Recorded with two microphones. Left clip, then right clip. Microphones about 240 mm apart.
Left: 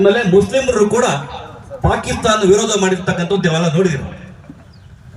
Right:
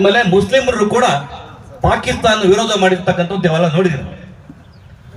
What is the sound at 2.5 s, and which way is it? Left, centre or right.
A man's voice, left.